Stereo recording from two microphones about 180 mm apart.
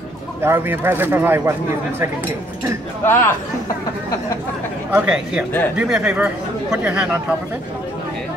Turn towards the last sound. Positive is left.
turn(degrees=-5)  # may be behind; listen again after turning